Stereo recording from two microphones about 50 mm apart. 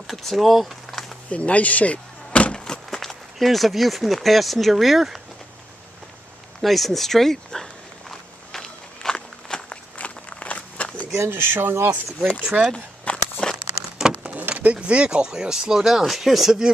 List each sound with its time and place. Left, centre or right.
0.0 s speech: centre
1.3 s speech: left; by 5.2 s centre
6.6 s speech: centre
8.5 s walk: centre
9.9 s walk: left
11.2 s speech: right
12.7 s a sound: left
13.9 s a sound: centre
14.5 s speech: right; by 16.7 s centre